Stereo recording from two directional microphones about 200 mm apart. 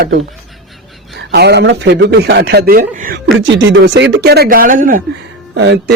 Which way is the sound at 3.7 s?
65° right (ahead or behind).